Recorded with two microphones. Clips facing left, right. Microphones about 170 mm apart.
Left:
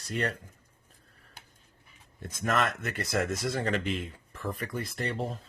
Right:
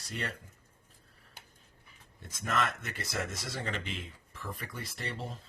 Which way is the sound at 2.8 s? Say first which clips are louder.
Left 7 dB; 55° left (ahead or behind).